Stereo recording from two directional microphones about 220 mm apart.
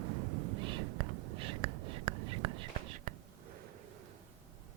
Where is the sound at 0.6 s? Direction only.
20° right (ahead or behind).